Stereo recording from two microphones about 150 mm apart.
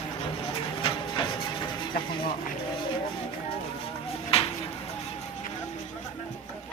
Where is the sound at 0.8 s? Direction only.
30° left (ahead or behind).